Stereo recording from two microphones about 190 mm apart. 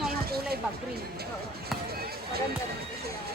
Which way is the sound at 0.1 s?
55° right (ahead or behind).